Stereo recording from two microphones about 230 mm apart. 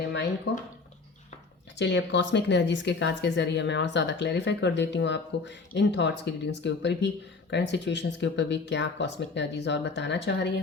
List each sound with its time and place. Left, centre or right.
0.5 s speech: left
1.8 s speech: left